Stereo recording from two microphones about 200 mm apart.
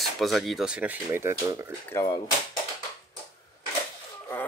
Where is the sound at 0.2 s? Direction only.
Centre (ahead or behind).